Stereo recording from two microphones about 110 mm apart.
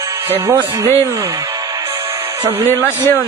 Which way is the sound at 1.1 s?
25° right (ahead or behind).